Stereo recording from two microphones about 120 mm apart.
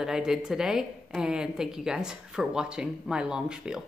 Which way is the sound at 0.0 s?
5° right (ahead or behind).